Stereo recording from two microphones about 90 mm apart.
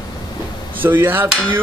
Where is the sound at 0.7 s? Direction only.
20° right (ahead or behind).